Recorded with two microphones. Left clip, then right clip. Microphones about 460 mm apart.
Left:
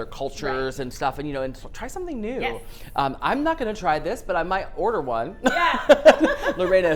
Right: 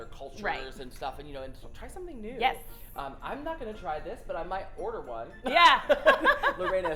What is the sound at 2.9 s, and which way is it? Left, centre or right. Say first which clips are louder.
A woman's voice: left 15 dB; left.